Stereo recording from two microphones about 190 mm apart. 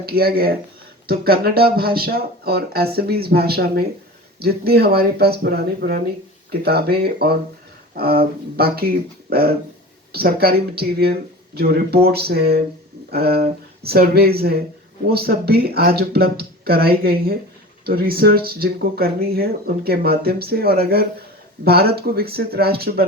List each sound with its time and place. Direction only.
0.0 s speech: 55° right (ahead or behind)